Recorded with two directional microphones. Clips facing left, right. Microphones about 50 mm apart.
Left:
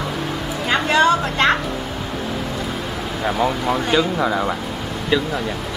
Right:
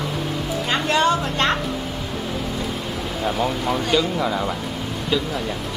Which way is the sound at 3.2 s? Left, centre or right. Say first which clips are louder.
Left 3 dB; left.